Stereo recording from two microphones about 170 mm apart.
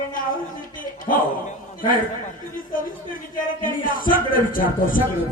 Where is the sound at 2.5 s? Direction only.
55° left (ahead or behind).